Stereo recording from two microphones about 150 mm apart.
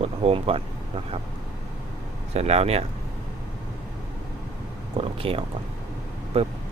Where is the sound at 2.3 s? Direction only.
45° right (ahead or behind).